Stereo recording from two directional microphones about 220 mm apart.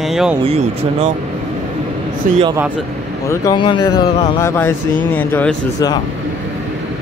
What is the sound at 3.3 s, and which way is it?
Speech, 20° left (ahead or behind).